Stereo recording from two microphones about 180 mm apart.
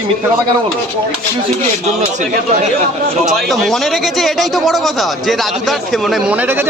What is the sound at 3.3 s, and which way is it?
Speech, centre (ahead or behind).